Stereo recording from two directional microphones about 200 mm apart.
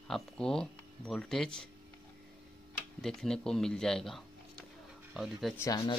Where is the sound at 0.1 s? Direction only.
5° left (ahead or behind).